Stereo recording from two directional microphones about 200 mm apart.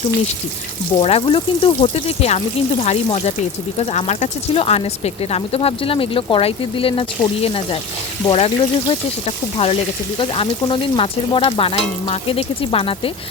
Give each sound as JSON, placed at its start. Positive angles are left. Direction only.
{"t": 0.9, "sound": "speech", "side_deg": 30}